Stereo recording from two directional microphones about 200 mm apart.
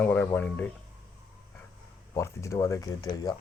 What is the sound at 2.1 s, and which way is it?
Speech, 15° left (ahead or behind).